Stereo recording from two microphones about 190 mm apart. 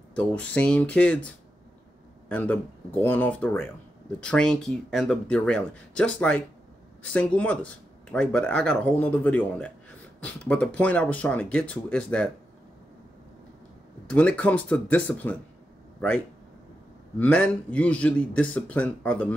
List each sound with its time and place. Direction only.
0.1 s speech: 5° left (ahead or behind)
2.2 s speech: 5° left (ahead or behind)
14.1 s speech: 5° left (ahead or behind)
17.2 s speech: 5° left (ahead or behind)